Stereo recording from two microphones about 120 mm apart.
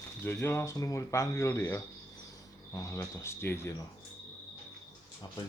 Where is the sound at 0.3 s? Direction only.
20° left (ahead or behind).